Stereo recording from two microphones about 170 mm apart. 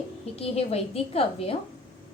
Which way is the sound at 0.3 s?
35° left (ahead or behind).